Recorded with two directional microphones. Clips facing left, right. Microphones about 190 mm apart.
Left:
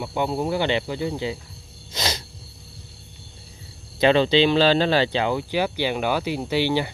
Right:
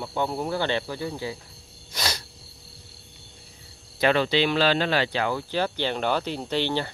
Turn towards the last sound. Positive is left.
turn(degrees=10)  # may be behind; listen again after turning